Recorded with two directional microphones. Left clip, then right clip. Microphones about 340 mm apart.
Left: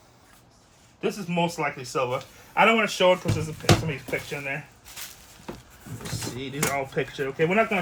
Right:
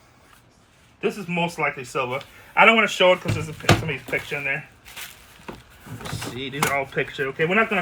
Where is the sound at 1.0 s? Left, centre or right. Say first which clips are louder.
Right 2 dB; centre.